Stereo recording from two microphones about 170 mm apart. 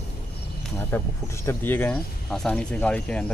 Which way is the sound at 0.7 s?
15° left (ahead or behind).